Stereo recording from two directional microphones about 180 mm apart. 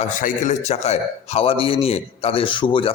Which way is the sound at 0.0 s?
40° left (ahead or behind).